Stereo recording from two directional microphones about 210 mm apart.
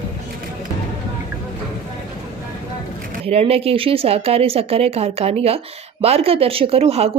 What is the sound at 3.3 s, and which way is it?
Speech, 30° right (ahead or behind).